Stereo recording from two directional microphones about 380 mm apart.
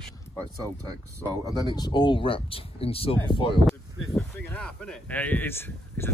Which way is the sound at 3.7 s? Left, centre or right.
Centre.